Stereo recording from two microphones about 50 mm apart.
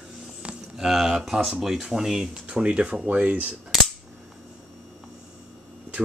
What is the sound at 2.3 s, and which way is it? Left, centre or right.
Speech, right.